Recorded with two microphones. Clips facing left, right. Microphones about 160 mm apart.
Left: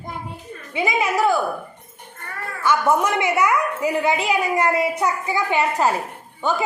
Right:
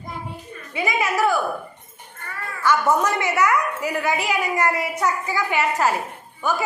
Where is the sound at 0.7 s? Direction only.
20° left (ahead or behind).